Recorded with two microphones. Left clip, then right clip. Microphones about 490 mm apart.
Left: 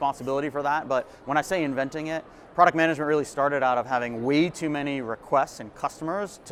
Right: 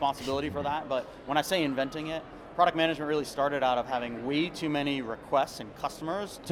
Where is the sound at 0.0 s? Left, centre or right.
Left.